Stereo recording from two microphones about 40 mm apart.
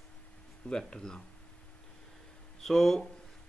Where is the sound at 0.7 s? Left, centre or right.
Centre.